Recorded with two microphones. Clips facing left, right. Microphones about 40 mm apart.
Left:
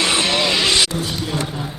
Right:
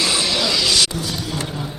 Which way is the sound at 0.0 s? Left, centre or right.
Left.